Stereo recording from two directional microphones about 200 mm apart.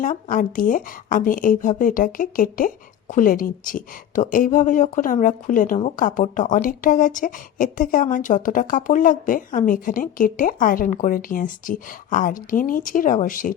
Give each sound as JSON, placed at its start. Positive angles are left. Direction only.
{"t": 0.0, "sound": "a woman's voice", "side_deg": 40}